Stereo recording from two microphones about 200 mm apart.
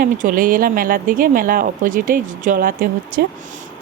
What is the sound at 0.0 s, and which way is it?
Speech, 40° right (ahead or behind).